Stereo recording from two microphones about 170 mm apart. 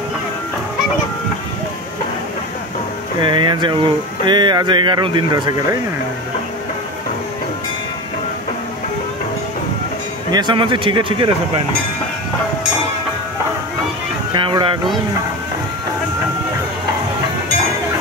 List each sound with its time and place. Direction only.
3.2 s speech: 30° right (ahead or behind)
10.3 s speech: 25° right (ahead or behind)
14.3 s speech: 30° right (ahead or behind)